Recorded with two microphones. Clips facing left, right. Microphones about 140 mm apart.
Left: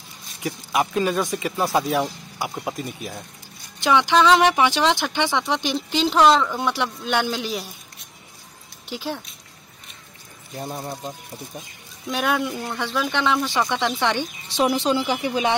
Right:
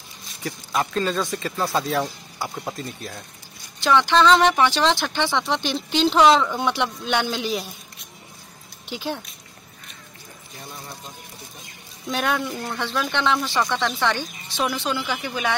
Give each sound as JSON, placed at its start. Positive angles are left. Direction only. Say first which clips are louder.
{"t": 0.4, "sound": "speech", "louder": "left 2 dB", "side_deg": 10}
{"t": 8.8, "sound": "speech", "louder": "even", "side_deg": 0}
{"t": 10.6, "sound": "speech", "louder": "left 9 dB", "side_deg": 45}
{"t": 12.1, "sound": "speech", "louder": "left 1 dB", "side_deg": 5}